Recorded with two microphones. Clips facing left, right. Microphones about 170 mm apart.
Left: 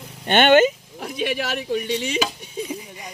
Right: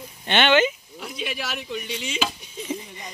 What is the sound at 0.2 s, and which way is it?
Speech, 45° left (ahead or behind).